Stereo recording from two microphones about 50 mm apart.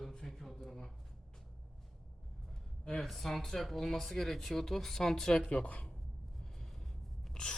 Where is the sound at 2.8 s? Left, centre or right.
Centre.